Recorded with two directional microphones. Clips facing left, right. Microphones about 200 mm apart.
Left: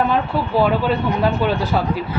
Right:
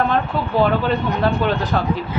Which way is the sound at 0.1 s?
10° left (ahead or behind).